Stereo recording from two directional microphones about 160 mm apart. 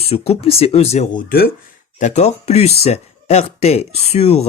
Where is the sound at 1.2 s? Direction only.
75° left (ahead or behind).